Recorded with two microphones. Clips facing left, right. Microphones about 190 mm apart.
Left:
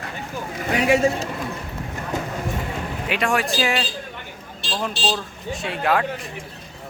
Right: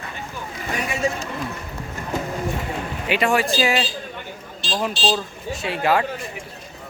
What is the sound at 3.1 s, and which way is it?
Speech, centre (ahead or behind).